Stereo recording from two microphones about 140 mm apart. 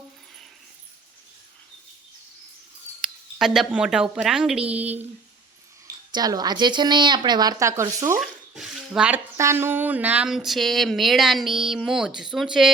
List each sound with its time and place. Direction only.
3.0 s speech: centre (ahead or behind)
6.1 s a woman's voice: 30° right (ahead or behind)
8.2 s water: 5° right (ahead or behind)
8.9 s a woman's voice: 10° right (ahead or behind)
9.4 s a sound: 20° right (ahead or behind); by 12.7 s centre (ahead or behind)